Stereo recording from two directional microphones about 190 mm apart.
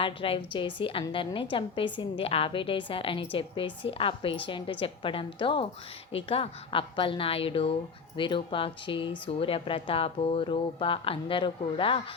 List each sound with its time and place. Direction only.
0.0 s a woman's voice: 25° left (ahead or behind)